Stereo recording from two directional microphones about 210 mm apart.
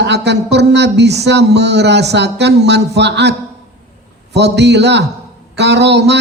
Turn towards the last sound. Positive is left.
turn(degrees=-55)  # may be behind; listen again after turning